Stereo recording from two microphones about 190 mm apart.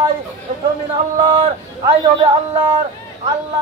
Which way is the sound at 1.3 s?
20° right (ahead or behind).